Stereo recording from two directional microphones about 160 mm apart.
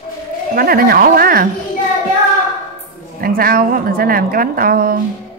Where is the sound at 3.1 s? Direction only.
65° right (ahead or behind).